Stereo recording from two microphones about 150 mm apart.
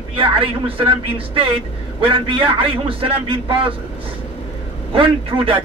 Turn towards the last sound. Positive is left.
turn(degrees=-35)  # may be behind; listen again after turning